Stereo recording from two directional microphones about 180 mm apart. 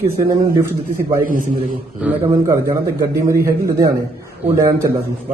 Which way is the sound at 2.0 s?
5° right (ahead or behind).